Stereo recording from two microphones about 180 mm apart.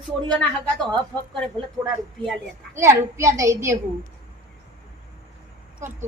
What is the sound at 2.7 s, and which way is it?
Speech, 15° right (ahead or behind).